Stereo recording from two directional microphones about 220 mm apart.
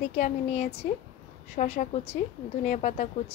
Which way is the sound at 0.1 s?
30° left (ahead or behind).